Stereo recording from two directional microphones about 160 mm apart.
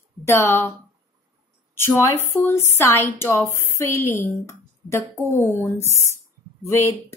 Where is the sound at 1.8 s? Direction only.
15° left (ahead or behind).